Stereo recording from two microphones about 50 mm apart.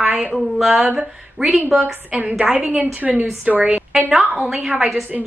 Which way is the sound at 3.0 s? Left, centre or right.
Right.